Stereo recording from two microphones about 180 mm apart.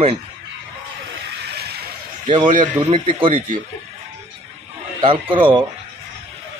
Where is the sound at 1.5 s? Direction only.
65° right (ahead or behind).